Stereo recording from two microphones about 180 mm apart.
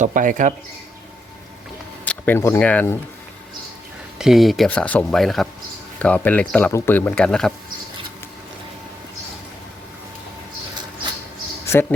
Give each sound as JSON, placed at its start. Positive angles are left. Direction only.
{"t": 0.0, "sound": "speech", "side_deg": -45}
{"t": 2.0, "sound": "speech", "side_deg": 10}
{"t": 4.2, "sound": "speech", "side_deg": 0}
{"t": 11.6, "sound": "a sound", "side_deg": 15}